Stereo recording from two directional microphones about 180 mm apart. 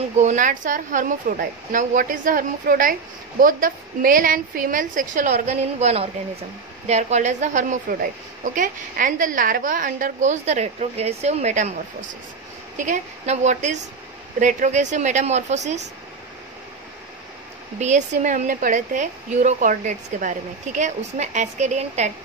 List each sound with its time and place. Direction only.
0.2 s speech: 45° right (ahead or behind)
12.7 s a woman's voice: 45° right (ahead or behind)
17.7 s speech: 40° right (ahead or behind)